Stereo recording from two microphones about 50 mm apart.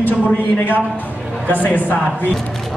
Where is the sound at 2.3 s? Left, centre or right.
Centre.